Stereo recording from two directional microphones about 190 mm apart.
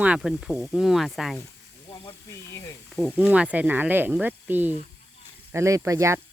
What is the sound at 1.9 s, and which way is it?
Snake, 25° left (ahead or behind).